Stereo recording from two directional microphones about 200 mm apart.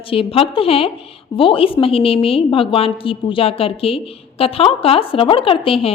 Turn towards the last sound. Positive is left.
turn(degrees=25)  # may be behind; listen again after turning